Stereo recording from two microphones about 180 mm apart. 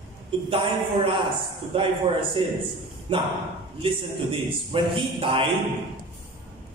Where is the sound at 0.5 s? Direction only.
25° right (ahead or behind).